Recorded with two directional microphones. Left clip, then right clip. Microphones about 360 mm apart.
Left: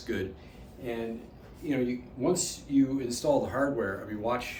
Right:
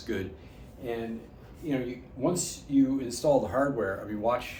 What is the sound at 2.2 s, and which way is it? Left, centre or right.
Speech, centre.